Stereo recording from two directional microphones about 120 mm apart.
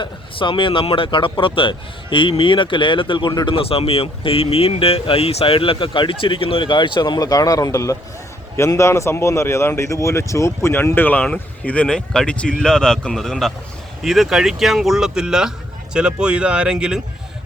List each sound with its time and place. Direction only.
0.0 s a man's voice: 40° left (ahead or behind); by 17.0 s 5° right (ahead or behind)